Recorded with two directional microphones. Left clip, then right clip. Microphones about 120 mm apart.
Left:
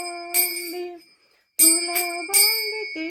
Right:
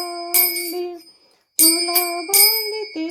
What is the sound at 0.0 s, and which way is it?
Music, 45° right (ahead or behind).